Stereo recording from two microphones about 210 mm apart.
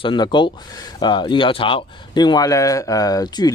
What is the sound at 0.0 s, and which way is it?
Speech, 20° left (ahead or behind).